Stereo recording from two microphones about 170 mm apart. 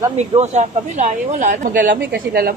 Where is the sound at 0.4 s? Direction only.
40° right (ahead or behind).